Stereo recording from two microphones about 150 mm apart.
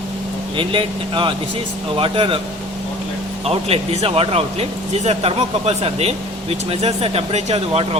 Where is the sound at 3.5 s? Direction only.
45° right (ahead or behind).